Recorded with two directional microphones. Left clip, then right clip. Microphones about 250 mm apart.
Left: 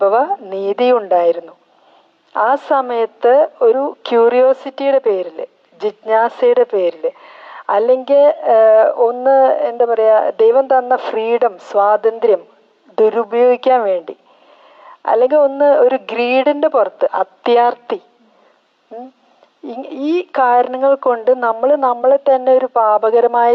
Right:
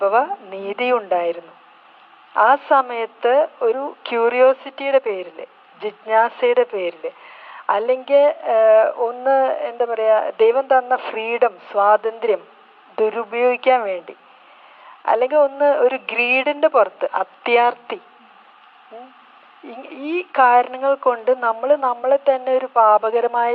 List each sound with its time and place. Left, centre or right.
0.0 s a woman's voice: left
19.6 s a woman's voice: left